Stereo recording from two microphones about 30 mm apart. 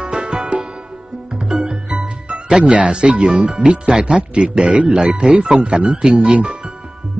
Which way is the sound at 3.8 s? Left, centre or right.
Right.